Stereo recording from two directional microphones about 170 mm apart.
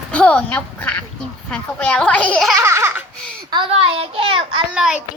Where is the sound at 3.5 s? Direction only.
30° right (ahead or behind).